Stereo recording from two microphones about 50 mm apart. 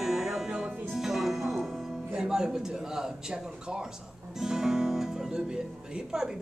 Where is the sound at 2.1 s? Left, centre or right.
Centre.